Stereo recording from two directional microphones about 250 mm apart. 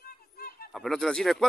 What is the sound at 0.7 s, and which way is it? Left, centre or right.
Speech, centre.